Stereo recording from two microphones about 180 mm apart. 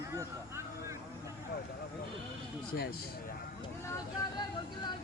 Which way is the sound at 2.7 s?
55° left (ahead or behind).